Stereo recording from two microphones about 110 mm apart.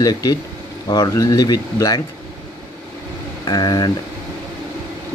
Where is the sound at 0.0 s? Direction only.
35° left (ahead or behind).